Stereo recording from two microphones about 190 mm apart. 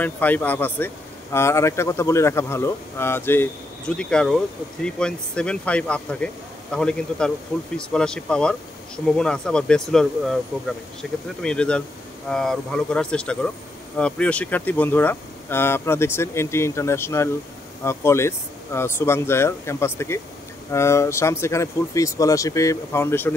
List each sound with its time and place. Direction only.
0.0 s speech: 10° left (ahead or behind)